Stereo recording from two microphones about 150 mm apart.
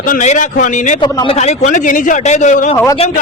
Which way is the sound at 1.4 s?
50° left (ahead or behind).